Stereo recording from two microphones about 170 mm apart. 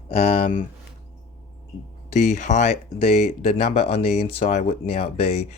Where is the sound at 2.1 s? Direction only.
45° left (ahead or behind).